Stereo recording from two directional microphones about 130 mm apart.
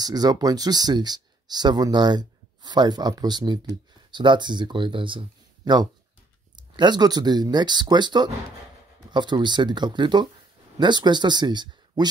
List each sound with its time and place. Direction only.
0.0 s speech: 30° right (ahead or behind)